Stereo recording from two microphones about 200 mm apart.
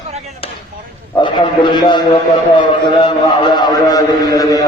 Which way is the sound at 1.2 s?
25° left (ahead or behind).